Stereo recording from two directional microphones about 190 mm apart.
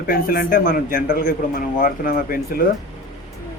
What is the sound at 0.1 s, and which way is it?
A man's voice, 50° left (ahead or behind).